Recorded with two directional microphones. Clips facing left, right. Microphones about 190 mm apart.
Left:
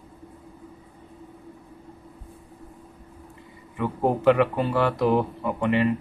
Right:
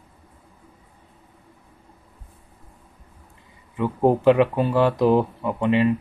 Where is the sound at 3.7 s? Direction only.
15° right (ahead or behind).